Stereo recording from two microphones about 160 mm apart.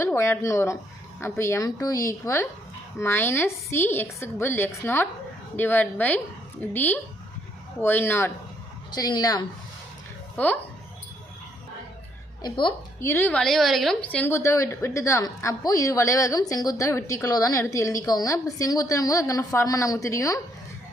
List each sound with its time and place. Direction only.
0.0 s a woman's voice: 15° left (ahead or behind)
8.9 s a woman's voice: 25° left (ahead or behind)
10.3 s speech: 10° left (ahead or behind)
12.4 s a woman's voice: 30° left (ahead or behind)
13.0 s a woman's voice: 15° left (ahead or behind)